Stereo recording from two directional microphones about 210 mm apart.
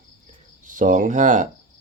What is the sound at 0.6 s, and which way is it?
Speech, 40° right (ahead or behind).